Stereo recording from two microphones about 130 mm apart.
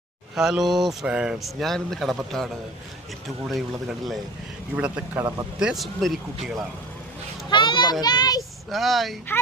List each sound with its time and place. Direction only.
0.3 s speech: 5° right (ahead or behind)
4.7 s speech: 10° right (ahead or behind)
7.5 s a child's voice: 40° left (ahead or behind)
8.7 s speech: centre (ahead or behind)